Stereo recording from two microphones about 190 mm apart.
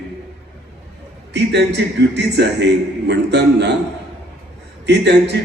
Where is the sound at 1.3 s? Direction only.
65° right (ahead or behind).